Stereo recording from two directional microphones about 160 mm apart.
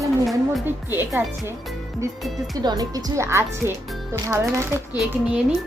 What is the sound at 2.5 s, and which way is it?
Speech, 25° right (ahead or behind).